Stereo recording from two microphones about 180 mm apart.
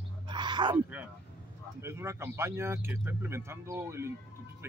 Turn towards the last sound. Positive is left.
turn(degrees=-15)  # may be behind; listen again after turning